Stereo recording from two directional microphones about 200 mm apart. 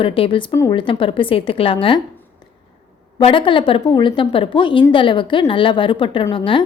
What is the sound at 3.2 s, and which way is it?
A woman's voice, 25° left (ahead or behind).